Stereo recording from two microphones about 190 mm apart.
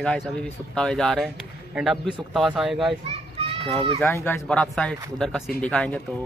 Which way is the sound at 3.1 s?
30° right (ahead or behind).